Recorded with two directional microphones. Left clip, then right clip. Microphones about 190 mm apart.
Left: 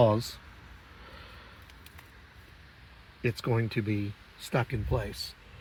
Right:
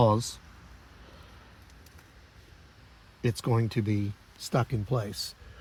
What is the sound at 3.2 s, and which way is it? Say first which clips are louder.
Speech: right 1 dB; 40° right (ahead or behind).